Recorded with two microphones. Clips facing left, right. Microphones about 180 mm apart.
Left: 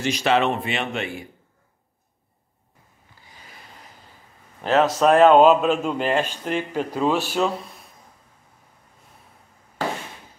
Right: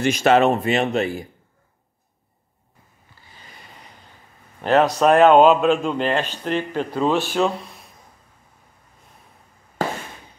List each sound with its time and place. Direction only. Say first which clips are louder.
0.0 s speech: right 5 dB; 50° right (ahead or behind)
4.6 s a man's voice: right 2 dB; centre (ahead or behind)